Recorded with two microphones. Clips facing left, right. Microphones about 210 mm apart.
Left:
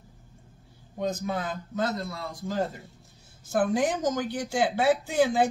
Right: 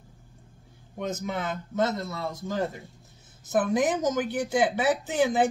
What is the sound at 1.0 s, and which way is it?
Speech, 20° right (ahead or behind).